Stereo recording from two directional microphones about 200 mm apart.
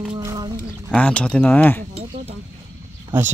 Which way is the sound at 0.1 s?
20° right (ahead or behind).